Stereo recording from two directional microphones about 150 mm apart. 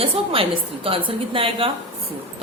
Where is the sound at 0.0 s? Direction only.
40° right (ahead or behind).